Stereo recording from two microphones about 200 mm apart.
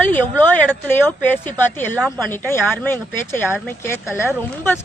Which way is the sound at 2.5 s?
10° left (ahead or behind).